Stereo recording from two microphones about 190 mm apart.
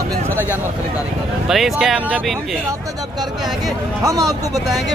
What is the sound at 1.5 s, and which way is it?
Speech, centre (ahead or behind).